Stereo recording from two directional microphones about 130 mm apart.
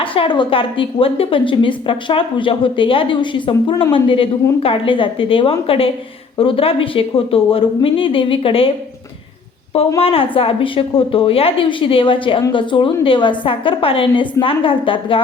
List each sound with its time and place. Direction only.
0.0 s a woman's voice: 40° left (ahead or behind)
10.0 s a woman's voice: 45° left (ahead or behind)